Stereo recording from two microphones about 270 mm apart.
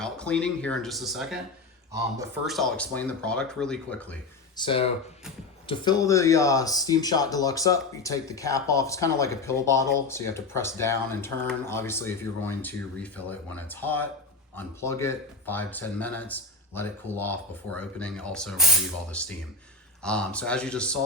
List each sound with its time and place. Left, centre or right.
0.0 s speech: centre
2.4 s speech: centre
4.5 s speech: centre
20.0 s speech: centre